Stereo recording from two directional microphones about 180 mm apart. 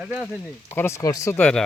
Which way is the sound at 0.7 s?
15° left (ahead or behind).